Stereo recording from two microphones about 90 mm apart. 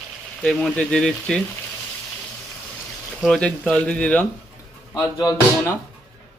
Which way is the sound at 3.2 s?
10° left (ahead or behind).